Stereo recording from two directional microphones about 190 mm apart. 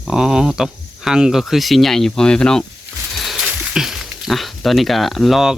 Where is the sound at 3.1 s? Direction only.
Centre (ahead or behind).